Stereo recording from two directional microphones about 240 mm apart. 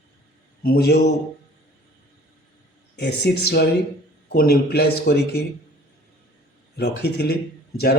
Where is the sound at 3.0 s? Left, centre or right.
Left.